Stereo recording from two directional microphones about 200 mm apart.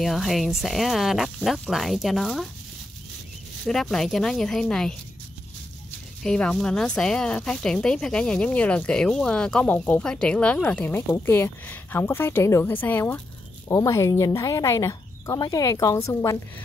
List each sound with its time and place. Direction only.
0.0 s speech: centre (ahead or behind)
3.6 s speech: centre (ahead or behind)
6.2 s speech: 5° left (ahead or behind)